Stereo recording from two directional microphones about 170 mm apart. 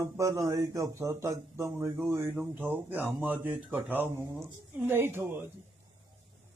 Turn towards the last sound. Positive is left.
turn(degrees=-15)  # may be behind; listen again after turning